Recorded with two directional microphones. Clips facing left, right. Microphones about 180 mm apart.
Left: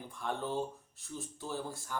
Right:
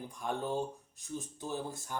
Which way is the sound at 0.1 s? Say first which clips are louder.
Right 1 dB; 15° right (ahead or behind).